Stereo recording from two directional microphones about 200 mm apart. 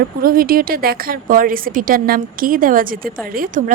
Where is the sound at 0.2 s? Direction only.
45° right (ahead or behind).